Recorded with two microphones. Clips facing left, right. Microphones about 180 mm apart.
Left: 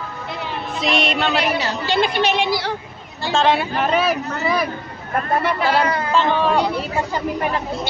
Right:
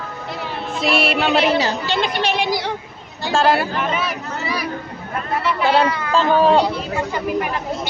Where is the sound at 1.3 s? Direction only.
25° right (ahead or behind).